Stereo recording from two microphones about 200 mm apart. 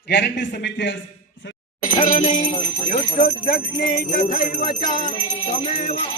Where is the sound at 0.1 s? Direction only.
60° left (ahead or behind).